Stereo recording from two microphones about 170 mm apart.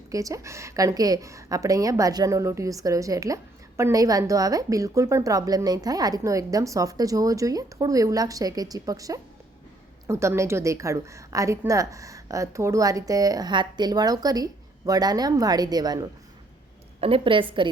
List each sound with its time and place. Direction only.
0.1 s a woman's voice: 20° right (ahead or behind)
17.0 s a woman's voice: 35° right (ahead or behind)